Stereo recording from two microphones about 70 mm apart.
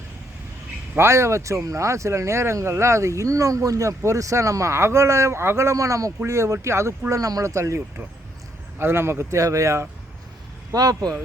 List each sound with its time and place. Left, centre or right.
0.9 s speech: right
7.1 s speech: right
7.4 s speech: right
8.8 s speech: right
10.7 s speech: right